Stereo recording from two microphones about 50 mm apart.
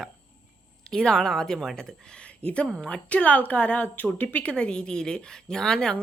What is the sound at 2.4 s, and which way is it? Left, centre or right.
A woman's voice, left.